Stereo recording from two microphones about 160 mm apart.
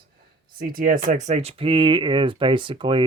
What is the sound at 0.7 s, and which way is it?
Speech, 65° right (ahead or behind).